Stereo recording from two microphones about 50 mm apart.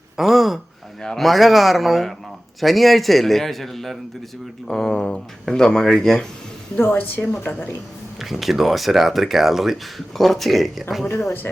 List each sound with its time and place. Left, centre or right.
0.2 s a sound: centre
1.0 s speech: centre
6.7 s a woman's voice: left
8.2 s speech: centre